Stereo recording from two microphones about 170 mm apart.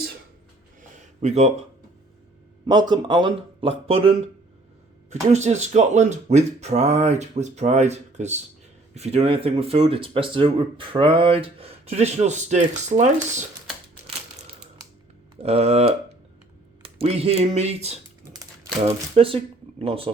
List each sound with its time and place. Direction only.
0.8 s a sound: 45° right (ahead or behind)
2.6 s speech: 25° right (ahead or behind)
5.3 s speech: 40° right (ahead or behind)
15.4 s speech: 35° right (ahead or behind)